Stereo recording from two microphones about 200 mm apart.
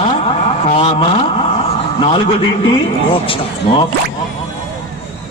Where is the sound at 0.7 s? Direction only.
30° left (ahead or behind).